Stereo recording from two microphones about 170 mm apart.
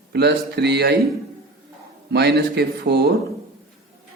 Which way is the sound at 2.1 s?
80° right.